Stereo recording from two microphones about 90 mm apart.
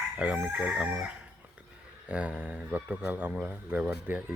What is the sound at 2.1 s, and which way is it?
Speech, 15° right (ahead or behind).